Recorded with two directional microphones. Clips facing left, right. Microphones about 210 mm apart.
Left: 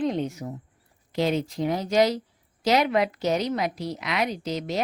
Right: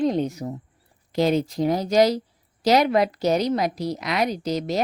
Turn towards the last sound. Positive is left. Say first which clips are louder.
# right 4 dB
turn(degrees=-40)  # may be behind; listen again after turning